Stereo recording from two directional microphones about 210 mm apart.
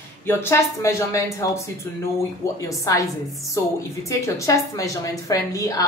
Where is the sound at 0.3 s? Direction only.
10° left (ahead or behind).